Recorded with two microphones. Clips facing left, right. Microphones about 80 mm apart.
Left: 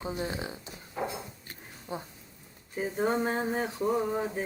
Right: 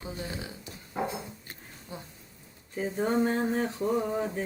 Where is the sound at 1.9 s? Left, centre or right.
Left.